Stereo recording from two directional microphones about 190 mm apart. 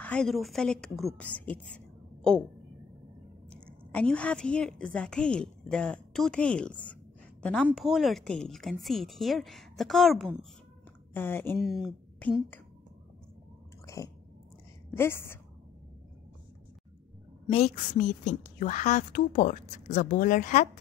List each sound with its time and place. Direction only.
0.0 s a woman's voice: 5° left (ahead or behind)
3.5 s a woman's voice: 5° left (ahead or behind)
11.1 s a woman's voice: 10° left (ahead or behind)
11.6 s a woman's voice: centre (ahead or behind)
13.9 s chewing: 15° left (ahead or behind)
15.0 s a woman's voice: 10° left (ahead or behind)
17.5 s a woman's voice: 35° left (ahead or behind)